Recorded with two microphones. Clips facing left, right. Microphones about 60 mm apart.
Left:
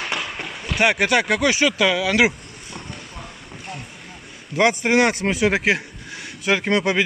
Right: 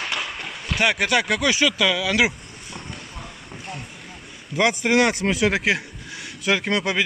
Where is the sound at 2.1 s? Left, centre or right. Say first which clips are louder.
Left 3 dB; centre.